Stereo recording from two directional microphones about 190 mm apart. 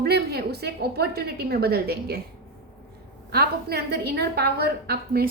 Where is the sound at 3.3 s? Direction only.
55° right (ahead or behind).